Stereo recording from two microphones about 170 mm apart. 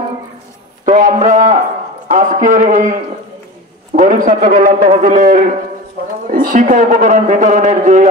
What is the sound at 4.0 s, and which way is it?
A man's voice, 50° right (ahead or behind).